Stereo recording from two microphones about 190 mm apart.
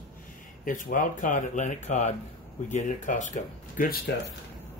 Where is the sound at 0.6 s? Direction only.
45° left (ahead or behind).